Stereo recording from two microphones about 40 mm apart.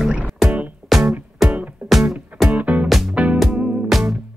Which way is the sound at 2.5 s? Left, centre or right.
Right.